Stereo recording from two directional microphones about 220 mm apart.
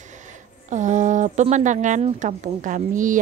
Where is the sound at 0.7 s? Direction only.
35° right (ahead or behind).